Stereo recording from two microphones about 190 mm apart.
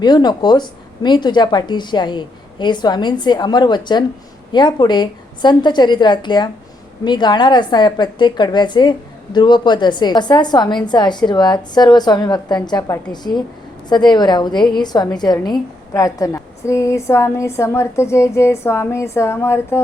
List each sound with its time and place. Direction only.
0.0 s a woman's voice: 20° left (ahead or behind)